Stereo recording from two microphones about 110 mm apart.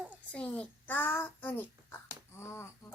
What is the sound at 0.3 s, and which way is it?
Child singing, 10° left (ahead or behind).